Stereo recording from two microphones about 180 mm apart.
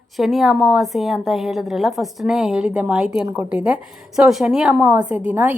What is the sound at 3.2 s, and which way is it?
Speech, 20° right (ahead or behind).